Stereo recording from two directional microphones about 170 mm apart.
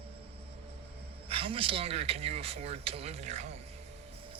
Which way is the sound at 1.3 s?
35° right (ahead or behind).